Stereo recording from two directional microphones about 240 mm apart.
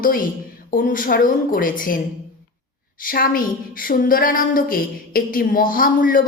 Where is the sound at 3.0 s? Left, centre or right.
Left.